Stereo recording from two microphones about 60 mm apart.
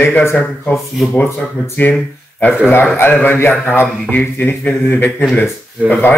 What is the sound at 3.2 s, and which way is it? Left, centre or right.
A man's voice, left.